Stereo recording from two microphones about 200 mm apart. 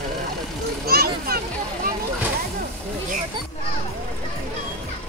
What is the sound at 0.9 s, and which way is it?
Splash, 50° right (ahead or behind).